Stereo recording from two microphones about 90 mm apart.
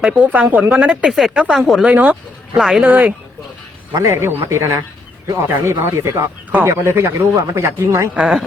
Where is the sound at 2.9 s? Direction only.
20° right (ahead or behind).